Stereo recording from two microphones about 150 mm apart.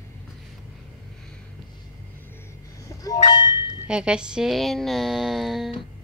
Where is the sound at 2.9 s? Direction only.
20° left (ahead or behind).